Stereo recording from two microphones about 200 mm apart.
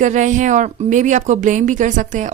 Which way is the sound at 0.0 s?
40° right (ahead or behind).